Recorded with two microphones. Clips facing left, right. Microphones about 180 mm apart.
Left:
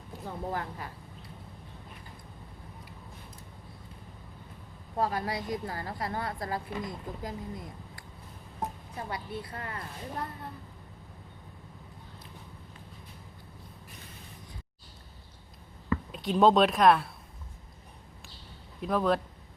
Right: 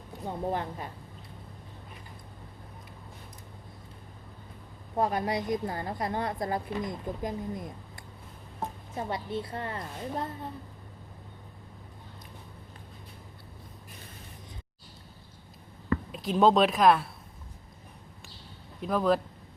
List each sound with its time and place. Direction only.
0.3 s a woman's voice: 20° right (ahead or behind)
4.9 s a woman's voice: 20° right (ahead or behind)
9.0 s a woman's voice: 25° right (ahead or behind)
16.1 s speech: centre (ahead or behind)
18.8 s speech: centre (ahead or behind)